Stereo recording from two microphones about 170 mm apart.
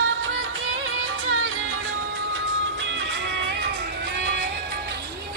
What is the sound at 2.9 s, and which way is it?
Music, 90° right.